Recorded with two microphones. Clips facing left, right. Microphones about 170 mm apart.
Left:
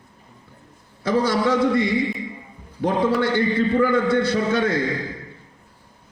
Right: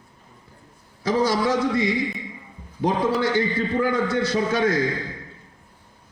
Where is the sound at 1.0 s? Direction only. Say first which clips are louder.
Left 1 dB; 60° left (ahead or behind).